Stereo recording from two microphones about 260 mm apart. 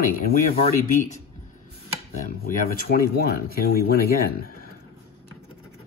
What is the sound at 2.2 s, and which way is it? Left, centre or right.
Speech, left.